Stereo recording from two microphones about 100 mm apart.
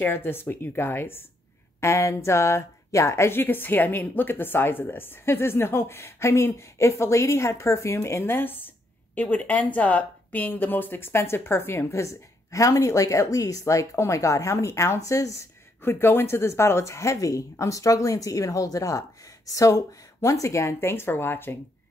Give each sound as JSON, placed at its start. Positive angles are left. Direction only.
{"t": 0.0, "sound": "speech", "side_deg": 20}
{"t": 15.8, "sound": "speech", "side_deg": 25}